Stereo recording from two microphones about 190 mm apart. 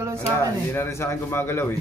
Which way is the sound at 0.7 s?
10° left (ahead or behind).